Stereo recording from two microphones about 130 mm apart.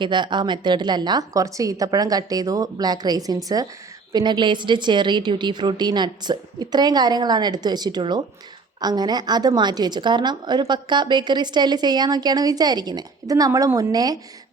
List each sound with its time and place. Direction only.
0.0 s a woman's voice: 35° right (ahead or behind)